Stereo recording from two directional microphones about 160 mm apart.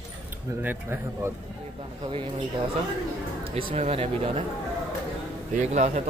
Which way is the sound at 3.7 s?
40° right (ahead or behind).